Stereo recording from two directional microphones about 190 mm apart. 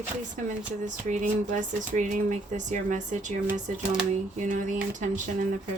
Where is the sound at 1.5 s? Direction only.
40° right (ahead or behind).